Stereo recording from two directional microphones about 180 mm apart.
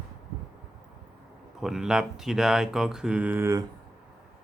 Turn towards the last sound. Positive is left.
turn(degrees=-15)  # may be behind; listen again after turning